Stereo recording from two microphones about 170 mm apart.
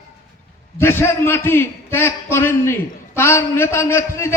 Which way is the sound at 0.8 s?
15° left (ahead or behind).